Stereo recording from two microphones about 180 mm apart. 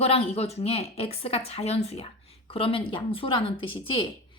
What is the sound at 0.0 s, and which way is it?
Speech, 35° left (ahead or behind).